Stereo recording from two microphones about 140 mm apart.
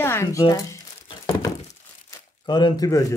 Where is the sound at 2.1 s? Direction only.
30° left (ahead or behind).